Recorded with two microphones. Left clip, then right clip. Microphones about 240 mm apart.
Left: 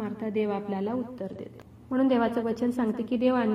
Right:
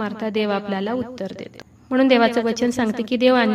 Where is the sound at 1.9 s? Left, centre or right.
Right.